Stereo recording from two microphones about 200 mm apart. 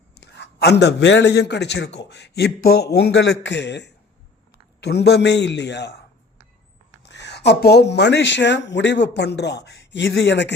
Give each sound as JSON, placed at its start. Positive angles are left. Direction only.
{"t": 0.2, "sound": "a man's voice", "side_deg": 60}
{"t": 7.0, "sound": "a man's voice", "side_deg": 60}